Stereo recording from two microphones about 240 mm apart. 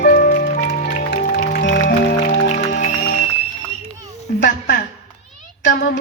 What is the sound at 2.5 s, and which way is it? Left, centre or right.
Music, left.